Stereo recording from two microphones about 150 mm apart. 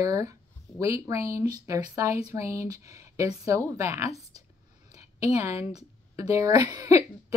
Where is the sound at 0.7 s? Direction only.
20° right (ahead or behind).